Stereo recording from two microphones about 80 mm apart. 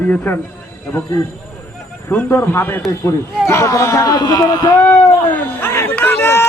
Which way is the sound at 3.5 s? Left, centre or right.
Left.